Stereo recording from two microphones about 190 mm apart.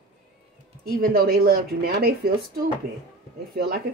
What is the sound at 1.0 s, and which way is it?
Speech, 55° right (ahead or behind).